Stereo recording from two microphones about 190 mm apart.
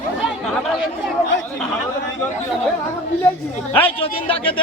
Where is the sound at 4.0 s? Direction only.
30° left (ahead or behind).